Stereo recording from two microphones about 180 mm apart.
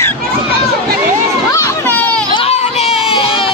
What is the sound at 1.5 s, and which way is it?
Children playing, 15° left (ahead or behind).